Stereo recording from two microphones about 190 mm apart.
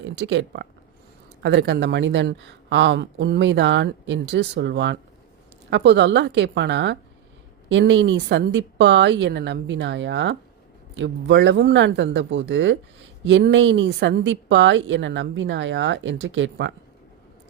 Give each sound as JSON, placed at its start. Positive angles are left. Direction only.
{"t": 0.0, "sound": "speech", "side_deg": -70}